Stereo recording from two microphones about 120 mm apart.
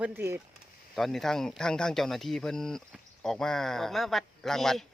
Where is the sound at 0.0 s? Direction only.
15° right (ahead or behind).